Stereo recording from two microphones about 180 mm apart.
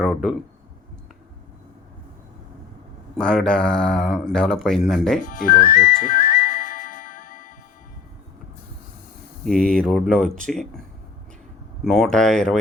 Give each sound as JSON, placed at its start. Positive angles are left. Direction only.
{"t": 0.0, "sound": "speech", "side_deg": 0}
{"t": 3.2, "sound": "speech", "side_deg": 5}
{"t": 5.2, "sound": "music", "side_deg": 45}
{"t": 9.4, "sound": "speech", "side_deg": 5}